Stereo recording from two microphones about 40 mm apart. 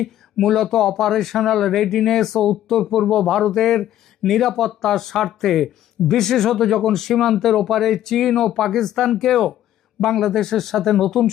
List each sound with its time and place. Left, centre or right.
0.0 s speech: centre